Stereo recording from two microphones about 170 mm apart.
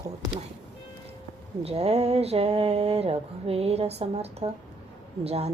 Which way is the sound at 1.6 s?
35° right (ahead or behind).